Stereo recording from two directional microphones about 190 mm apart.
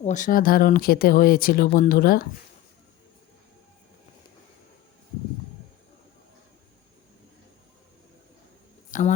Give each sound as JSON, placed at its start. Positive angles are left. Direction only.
{"t": 0.0, "sound": "speech", "side_deg": 40}
{"t": 8.9, "sound": "speech", "side_deg": 40}